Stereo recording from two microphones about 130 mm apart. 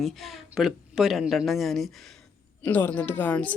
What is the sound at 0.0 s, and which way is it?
A woman's voice, centre (ahead or behind).